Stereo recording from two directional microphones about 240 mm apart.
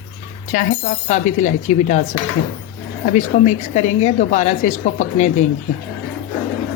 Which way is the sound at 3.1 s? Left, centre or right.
Left.